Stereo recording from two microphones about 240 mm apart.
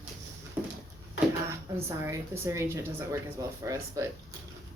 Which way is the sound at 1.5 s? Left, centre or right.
Centre.